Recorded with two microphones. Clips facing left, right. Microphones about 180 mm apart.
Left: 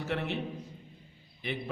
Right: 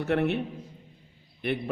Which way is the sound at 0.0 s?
60° right (ahead or behind).